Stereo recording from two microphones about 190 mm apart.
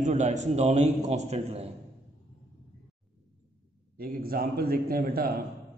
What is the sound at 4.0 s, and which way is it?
A man's voice, 50° right (ahead or behind).